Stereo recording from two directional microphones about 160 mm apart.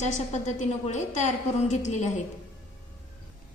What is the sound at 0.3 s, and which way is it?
A woman's voice, 45° left (ahead or behind).